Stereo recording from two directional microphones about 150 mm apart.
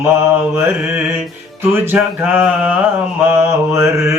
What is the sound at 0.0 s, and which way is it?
Mantra, 15° right (ahead or behind).